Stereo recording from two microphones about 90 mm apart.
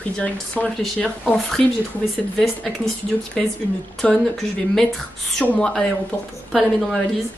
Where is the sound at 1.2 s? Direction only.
Centre (ahead or behind).